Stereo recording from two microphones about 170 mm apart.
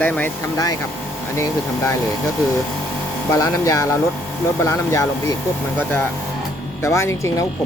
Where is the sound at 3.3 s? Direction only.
20° left (ahead or behind).